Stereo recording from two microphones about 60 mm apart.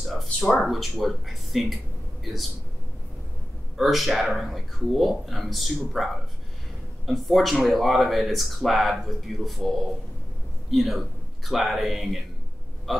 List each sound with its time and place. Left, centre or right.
0.0 s a sound: centre
0.6 s speech: centre
3.7 s a man's voice: centre